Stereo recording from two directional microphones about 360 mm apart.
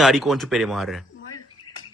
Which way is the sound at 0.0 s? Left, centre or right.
Centre.